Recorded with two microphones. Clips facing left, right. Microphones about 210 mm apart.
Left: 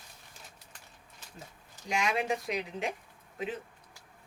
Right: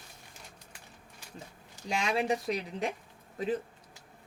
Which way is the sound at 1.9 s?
35° right (ahead or behind).